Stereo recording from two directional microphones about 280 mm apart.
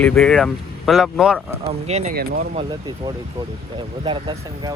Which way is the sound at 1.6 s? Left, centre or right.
Right.